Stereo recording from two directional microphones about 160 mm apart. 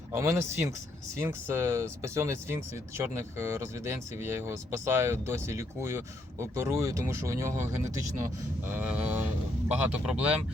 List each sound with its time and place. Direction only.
0.1 s speech: 15° right (ahead or behind)